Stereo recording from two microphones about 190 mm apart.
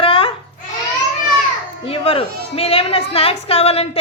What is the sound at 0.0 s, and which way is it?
Baby cry, 30° left (ahead or behind).